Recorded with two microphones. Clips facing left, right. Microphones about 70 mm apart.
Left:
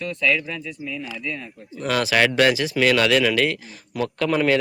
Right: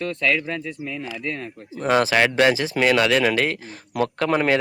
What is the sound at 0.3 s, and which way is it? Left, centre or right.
Speech, right.